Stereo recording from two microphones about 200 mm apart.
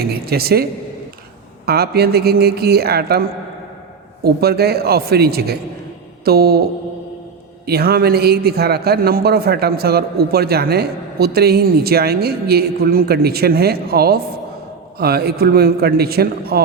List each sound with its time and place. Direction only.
0.0 s a man's voice: 50° right (ahead or behind)